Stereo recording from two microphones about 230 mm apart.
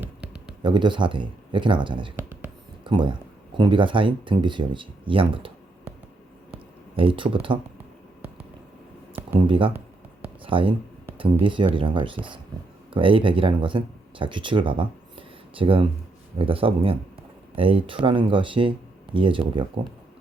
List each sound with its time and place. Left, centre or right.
0.0 s a sound: centre
0.6 s speech: centre
6.9 s speech: right
9.5 s speech: right